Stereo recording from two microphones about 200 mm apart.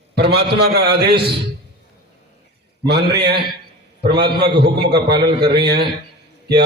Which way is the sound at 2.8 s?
55° right (ahead or behind).